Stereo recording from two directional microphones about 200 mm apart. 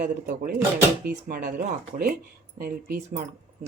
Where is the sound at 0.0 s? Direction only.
45° right (ahead or behind).